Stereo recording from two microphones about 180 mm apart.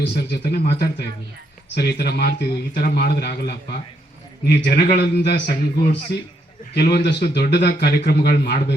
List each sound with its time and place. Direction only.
0.3 s a man's voice: 60° left (ahead or behind)